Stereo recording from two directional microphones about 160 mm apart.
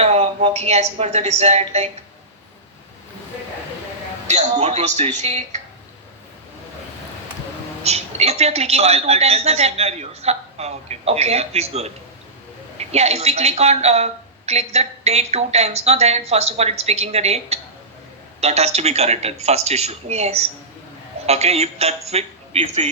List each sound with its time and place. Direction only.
0.0 s a woman's voice: 40° right (ahead or behind)
4.3 s speech: 45° right (ahead or behind)
7.9 s a woman's voice: 40° right (ahead or behind)
12.9 s a woman's voice: 40° right (ahead or behind)